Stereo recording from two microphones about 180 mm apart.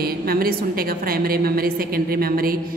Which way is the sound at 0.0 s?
55° right (ahead or behind).